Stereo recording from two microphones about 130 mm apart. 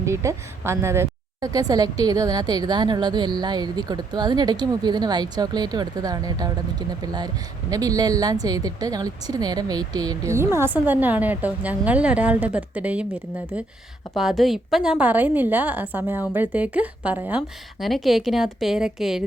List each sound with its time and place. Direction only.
0.0 s a woman's voice: 20° right (ahead or behind)
14.2 s a woman's voice: centre (ahead or behind)
17.7 s speech: centre (ahead or behind)